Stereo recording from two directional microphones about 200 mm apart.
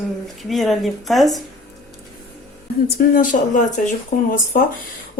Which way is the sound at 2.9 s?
45° left (ahead or behind).